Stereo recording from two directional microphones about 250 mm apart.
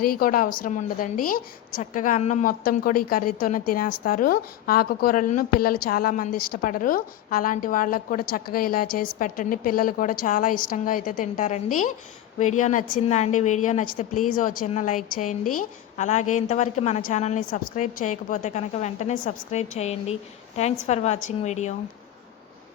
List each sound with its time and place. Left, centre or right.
0.0 s a woman's voice: left